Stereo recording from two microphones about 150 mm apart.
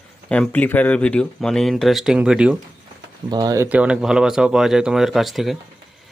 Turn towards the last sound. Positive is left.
turn(degrees=0)  # may be behind; listen again after turning